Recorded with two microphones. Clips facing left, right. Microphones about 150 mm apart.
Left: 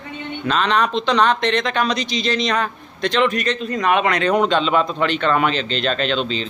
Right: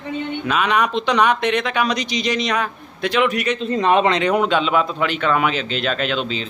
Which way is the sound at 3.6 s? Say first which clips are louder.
Right 3 dB; 30° right (ahead or behind).